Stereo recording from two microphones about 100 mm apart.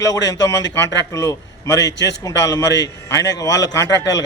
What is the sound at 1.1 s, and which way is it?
A man's voice, 35° left (ahead or behind).